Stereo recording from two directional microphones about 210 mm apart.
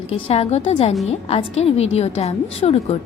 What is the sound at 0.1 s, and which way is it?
A woman's voice, 30° left (ahead or behind).